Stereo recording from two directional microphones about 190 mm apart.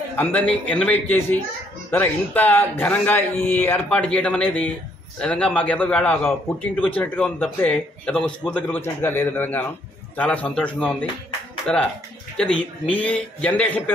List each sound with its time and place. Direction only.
0.1 s speech: 10° left (ahead or behind)